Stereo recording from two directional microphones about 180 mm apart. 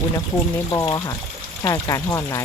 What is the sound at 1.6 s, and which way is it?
Speech, 20° left (ahead or behind).